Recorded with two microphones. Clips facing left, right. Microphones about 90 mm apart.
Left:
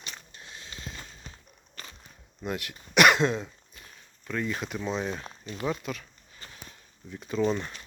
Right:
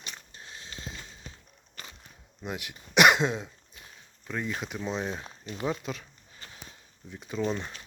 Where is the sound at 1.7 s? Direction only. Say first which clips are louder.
Even; 15° right (ahead or behind).